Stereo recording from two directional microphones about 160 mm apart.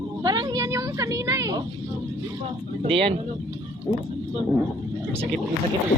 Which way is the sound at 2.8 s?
35° right (ahead or behind).